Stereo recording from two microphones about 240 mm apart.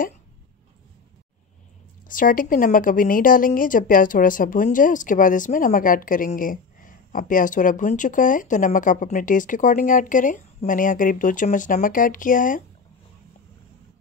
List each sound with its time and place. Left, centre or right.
2.0 s a woman's voice: left